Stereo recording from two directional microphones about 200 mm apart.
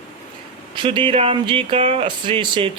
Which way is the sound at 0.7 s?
25° right (ahead or behind).